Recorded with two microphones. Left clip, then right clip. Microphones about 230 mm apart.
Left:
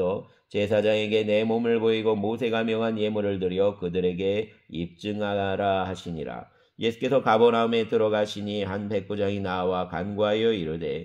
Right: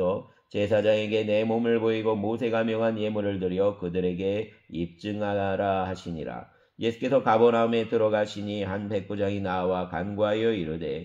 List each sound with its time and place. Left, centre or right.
0.6 s speech: left
1.9 s speech: left